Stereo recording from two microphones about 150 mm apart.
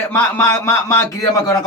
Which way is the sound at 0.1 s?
15° left (ahead or behind).